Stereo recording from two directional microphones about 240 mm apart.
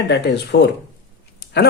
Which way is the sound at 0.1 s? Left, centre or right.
Left.